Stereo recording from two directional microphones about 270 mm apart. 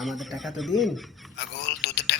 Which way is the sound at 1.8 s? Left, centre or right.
Left.